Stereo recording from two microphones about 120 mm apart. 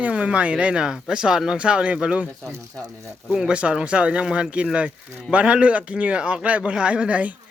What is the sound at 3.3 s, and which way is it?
A man's voice, 10° right (ahead or behind).